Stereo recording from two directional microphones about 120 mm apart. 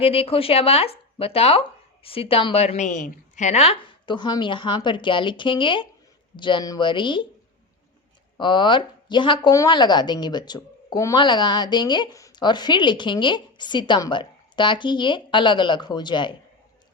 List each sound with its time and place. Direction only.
0.0 s a woman's voice: 55° left (ahead or behind)
8.4 s a woman's voice: 40° left (ahead or behind)